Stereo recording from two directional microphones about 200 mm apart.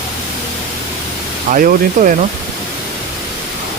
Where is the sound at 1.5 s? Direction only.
45° right (ahead or behind).